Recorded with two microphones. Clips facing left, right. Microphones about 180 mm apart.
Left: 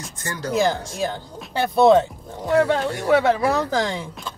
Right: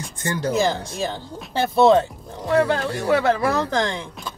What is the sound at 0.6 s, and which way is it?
Speech, centre (ahead or behind).